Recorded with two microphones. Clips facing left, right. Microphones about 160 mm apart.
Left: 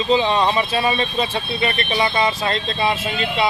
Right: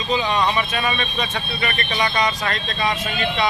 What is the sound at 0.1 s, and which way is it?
Speech, 30° left (ahead or behind).